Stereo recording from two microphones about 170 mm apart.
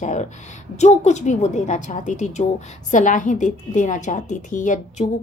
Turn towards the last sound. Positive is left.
turn(degrees=45)  # may be behind; listen again after turning